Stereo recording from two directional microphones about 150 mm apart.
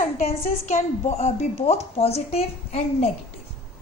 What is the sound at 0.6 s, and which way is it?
A woman's voice, 50° left (ahead or behind).